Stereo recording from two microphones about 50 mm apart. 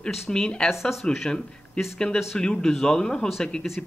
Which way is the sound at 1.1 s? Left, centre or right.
Centre.